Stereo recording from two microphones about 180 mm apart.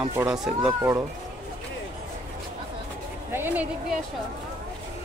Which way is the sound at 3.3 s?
10° right (ahead or behind).